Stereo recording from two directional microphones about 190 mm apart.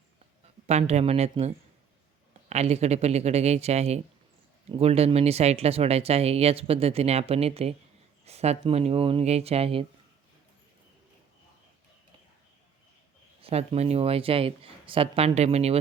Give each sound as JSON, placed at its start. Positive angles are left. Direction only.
{"t": 0.7, "sound": "speech", "side_deg": -35}
{"t": 13.4, "sound": "speech", "side_deg": -30}